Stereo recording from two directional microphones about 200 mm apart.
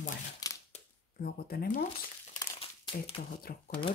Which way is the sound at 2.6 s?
25° left (ahead or behind).